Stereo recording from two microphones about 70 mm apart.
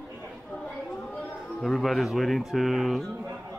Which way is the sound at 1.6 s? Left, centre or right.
Centre.